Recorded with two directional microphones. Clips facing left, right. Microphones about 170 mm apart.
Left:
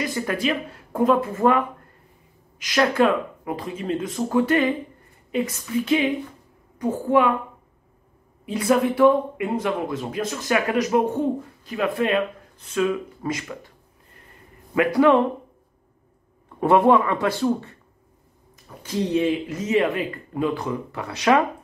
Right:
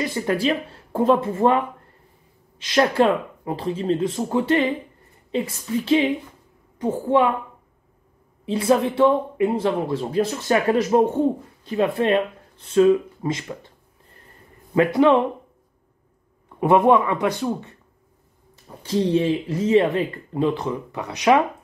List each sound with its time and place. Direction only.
0.1 s speech: 30° right (ahead or behind)
2.6 s speech: 30° right (ahead or behind)
8.5 s speech: 25° right (ahead or behind)
14.8 s speech: 25° right (ahead or behind)
16.5 s speech: 20° right (ahead or behind)
18.8 s speech: 30° right (ahead or behind)